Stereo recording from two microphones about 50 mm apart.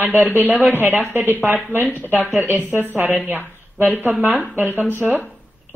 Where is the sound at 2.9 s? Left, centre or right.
Right.